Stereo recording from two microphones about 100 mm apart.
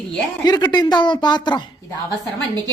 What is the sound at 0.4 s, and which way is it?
Speech, 45° left (ahead or behind).